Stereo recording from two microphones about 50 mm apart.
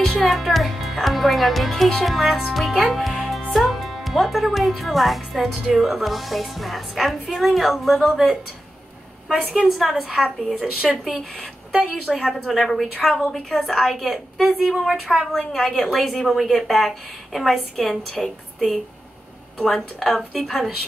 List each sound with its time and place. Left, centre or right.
0.0 s music: centre
2.0 s speech: centre
2.5 s music: centre
3.5 s speech: centre
9.8 s a woman's voice: centre; by 12.2 s right
12.4 s speech: centre
12.9 s a woman's voice: centre
13.8 s speech: centre
15.3 s a woman's voice: centre
19.6 s speech: centre